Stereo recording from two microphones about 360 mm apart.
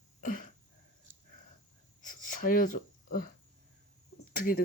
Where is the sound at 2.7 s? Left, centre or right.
Left.